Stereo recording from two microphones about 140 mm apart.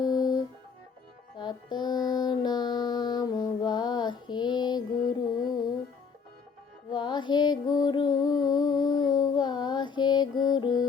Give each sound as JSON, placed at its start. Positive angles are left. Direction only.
{"t": 0.0, "sound": "music", "side_deg": 30}
{"t": 1.4, "sound": "mantra", "side_deg": 30}
{"t": 4.9, "sound": "music", "side_deg": 75}
{"t": 6.9, "sound": "music", "side_deg": 35}